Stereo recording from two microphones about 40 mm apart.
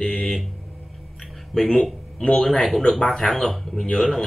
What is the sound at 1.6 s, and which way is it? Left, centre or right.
Speech, centre.